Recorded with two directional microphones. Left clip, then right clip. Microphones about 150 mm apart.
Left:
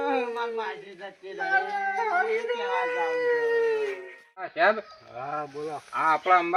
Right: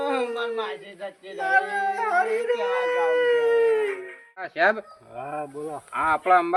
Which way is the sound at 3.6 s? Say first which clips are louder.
Right 4 dB; centre (ahead or behind).